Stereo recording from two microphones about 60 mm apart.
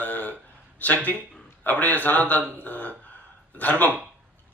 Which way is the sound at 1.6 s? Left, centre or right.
Left.